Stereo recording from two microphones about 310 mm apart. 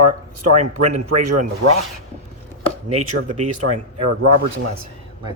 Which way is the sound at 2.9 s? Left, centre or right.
Right.